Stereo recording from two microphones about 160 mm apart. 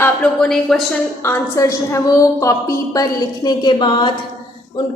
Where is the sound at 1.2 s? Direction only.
15° left (ahead or behind).